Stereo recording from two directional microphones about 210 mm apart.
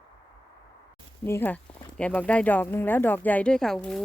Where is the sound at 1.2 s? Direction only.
10° left (ahead or behind).